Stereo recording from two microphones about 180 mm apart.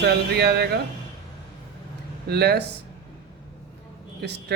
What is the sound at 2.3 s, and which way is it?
Speech, 65° right (ahead or behind).